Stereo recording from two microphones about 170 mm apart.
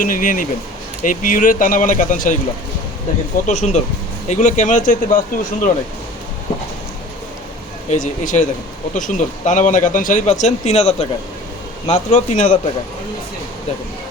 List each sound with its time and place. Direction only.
0.0 s speech: 55° left (ahead or behind)
3.4 s speech: 45° left (ahead or behind)
7.9 s speech: 50° left (ahead or behind)